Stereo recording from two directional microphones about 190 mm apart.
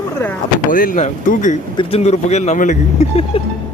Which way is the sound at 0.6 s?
45° left (ahead or behind).